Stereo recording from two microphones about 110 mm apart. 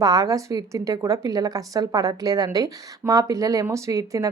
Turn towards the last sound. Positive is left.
turn(degrees=-30)  # may be behind; listen again after turning